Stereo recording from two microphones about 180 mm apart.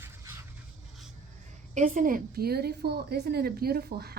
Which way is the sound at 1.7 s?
45° right (ahead or behind).